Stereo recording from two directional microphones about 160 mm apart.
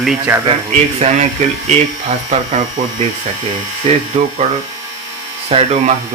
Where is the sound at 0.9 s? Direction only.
45° right (ahead or behind).